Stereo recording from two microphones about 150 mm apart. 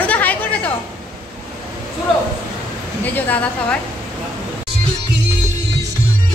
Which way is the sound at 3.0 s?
10° left (ahead or behind).